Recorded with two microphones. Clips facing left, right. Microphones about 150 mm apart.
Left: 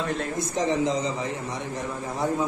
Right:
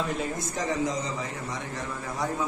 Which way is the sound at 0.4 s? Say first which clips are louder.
Left 4 dB; 20° left (ahead or behind).